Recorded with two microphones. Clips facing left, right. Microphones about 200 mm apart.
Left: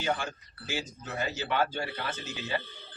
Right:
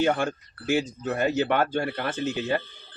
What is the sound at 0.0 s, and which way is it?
Speech, 55° right (ahead or behind).